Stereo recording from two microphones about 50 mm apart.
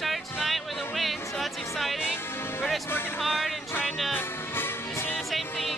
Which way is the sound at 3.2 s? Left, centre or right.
Centre.